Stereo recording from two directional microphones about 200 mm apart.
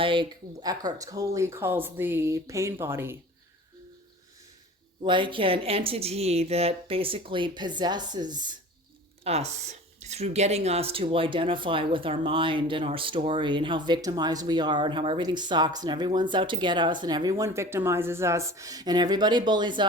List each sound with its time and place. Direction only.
0.0 s speech: 25° right (ahead or behind)
5.0 s speech: 25° right (ahead or behind)
9.2 s speech: 30° right (ahead or behind)